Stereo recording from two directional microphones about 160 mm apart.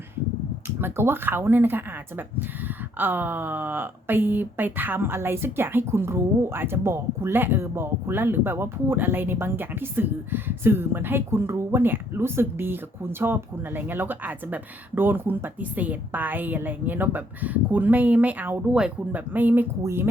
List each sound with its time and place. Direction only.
0.8 s speech: 15° right (ahead or behind)